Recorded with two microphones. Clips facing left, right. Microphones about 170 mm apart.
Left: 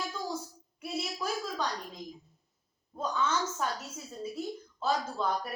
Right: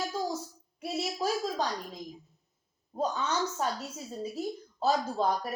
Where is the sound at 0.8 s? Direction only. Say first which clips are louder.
Right 4 dB; 35° right (ahead or behind).